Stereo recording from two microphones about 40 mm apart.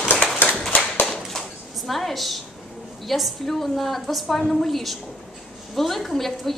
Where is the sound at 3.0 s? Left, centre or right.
Centre.